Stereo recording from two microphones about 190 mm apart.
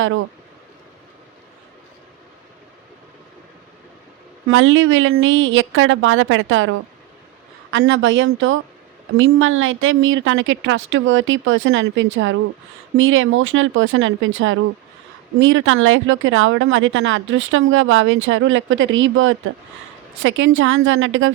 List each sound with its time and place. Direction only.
4.4 s speech: 90° right
7.7 s a woman's voice: 75° right (ahead or behind); by 21.3 s 90° right